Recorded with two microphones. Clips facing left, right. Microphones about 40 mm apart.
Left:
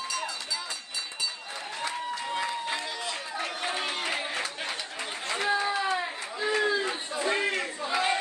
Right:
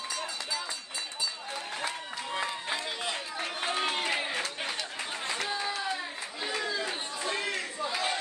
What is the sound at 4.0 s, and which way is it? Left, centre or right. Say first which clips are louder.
Music: even; centre.